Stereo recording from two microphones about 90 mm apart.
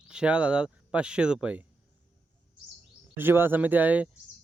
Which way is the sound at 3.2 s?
25° right (ahead or behind).